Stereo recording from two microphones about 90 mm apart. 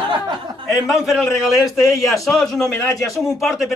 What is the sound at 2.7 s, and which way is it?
Speech, 35° left (ahead or behind).